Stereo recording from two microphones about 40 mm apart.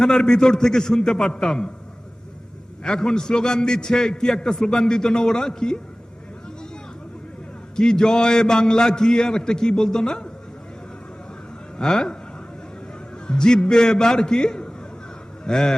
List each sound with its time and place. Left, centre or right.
0.0 s a man's voice: centre
2.8 s a man's voice: left
7.8 s a man's voice: centre
11.8 s a man's voice: centre
13.2 s a man's voice: centre